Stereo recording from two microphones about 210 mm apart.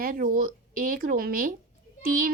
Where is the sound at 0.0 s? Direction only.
40° right (ahead or behind).